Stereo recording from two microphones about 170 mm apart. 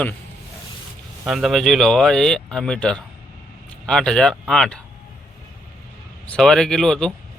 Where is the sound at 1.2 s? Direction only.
Centre (ahead or behind).